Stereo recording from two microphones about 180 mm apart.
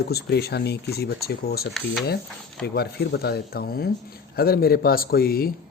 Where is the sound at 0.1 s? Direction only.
65° left (ahead or behind).